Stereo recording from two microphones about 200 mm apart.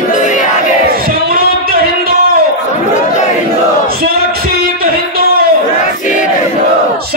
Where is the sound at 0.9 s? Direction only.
50° right (ahead or behind).